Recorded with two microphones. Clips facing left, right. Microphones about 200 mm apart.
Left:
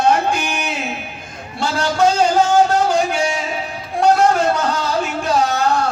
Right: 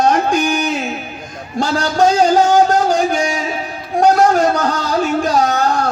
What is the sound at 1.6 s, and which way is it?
Speech, 40° right (ahead or behind).